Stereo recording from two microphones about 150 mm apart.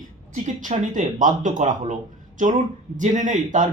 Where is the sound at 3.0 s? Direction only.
55° right (ahead or behind).